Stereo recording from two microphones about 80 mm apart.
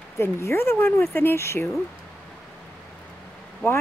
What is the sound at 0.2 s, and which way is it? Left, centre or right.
Speech, left.